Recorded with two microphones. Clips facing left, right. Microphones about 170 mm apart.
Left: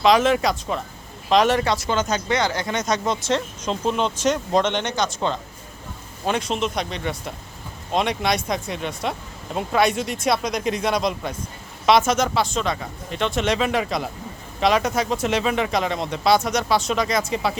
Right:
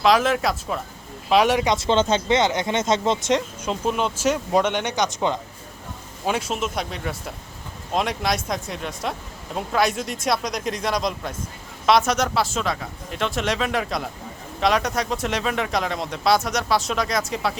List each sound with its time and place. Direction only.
0.0 s speech: centre (ahead or behind)
1.7 s speech: 25° right (ahead or behind)
3.6 s speech: 5° right (ahead or behind)
6.2 s speech: 5° right (ahead or behind)